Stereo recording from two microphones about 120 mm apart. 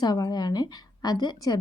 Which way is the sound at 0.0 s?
35° left (ahead or behind).